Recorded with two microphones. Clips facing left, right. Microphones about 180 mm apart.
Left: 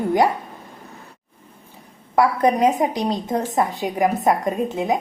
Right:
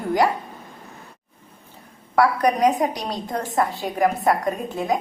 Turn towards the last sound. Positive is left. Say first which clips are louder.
# left 2 dB
turn(degrees=20)  # may be behind; listen again after turning